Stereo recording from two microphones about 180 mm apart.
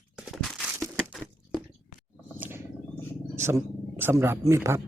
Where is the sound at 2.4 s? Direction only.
15° right (ahead or behind).